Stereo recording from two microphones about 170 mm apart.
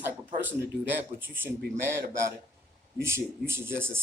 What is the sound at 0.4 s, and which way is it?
Speech, 10° right (ahead or behind).